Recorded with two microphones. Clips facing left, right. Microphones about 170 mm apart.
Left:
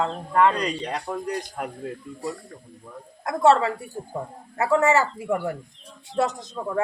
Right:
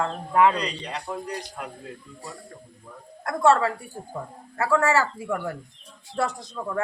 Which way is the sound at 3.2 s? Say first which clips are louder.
Left 2 dB; 20° left (ahead or behind).